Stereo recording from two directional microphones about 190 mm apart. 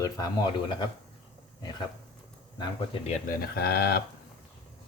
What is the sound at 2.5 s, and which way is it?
Speech, 30° left (ahead or behind).